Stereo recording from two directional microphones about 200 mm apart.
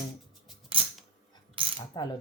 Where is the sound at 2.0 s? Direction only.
20° left (ahead or behind).